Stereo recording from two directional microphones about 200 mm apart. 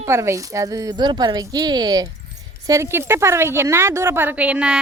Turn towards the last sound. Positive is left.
turn(degrees=-5)  # may be behind; listen again after turning